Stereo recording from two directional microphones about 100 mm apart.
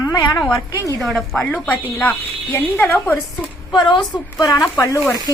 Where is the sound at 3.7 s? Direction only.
50° left (ahead or behind).